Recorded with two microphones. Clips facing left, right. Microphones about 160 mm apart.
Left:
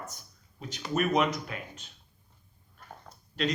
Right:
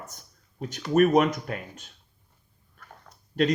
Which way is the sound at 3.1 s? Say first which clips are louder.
Left 2 dB; 10° left (ahead or behind).